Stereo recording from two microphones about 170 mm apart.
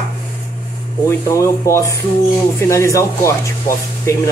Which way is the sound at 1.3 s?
15° left (ahead or behind).